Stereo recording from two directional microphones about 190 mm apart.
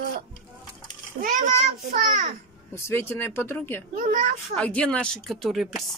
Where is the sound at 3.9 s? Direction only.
45° right (ahead or behind).